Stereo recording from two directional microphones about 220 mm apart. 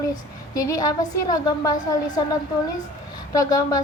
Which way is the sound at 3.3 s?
15° left (ahead or behind).